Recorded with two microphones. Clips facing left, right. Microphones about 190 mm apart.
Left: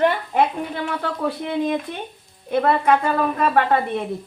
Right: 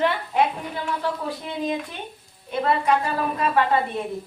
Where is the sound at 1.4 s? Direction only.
55° left (ahead or behind).